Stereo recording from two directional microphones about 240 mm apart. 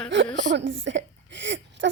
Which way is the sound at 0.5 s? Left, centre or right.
Right.